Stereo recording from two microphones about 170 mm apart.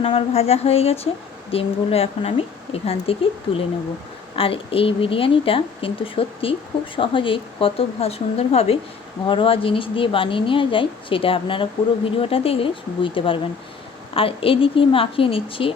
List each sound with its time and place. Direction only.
0.0 s a woman's voice: 35° left (ahead or behind)